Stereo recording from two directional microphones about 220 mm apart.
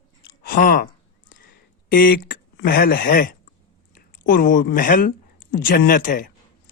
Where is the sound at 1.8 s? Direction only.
40° left (ahead or behind).